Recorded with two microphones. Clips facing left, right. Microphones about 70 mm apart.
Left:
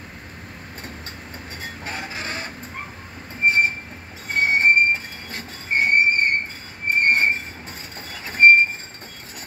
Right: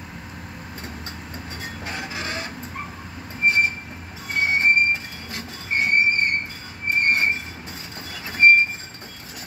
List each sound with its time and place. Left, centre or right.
1.6 s vehicle: left
3.4 s train: left